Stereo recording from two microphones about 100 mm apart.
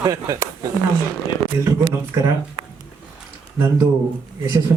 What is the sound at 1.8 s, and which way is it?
Speech, 50° right (ahead or behind).